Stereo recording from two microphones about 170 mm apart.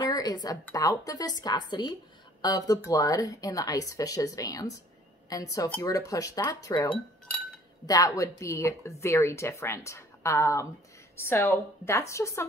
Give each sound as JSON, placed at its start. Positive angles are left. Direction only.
{"t": 0.1, "sound": "a woman's voice", "side_deg": 25}